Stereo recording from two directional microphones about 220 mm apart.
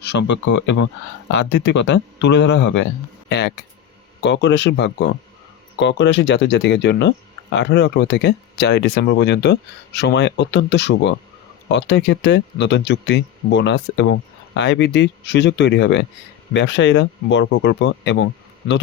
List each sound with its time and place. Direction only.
0.0 s speech: 50° left (ahead or behind)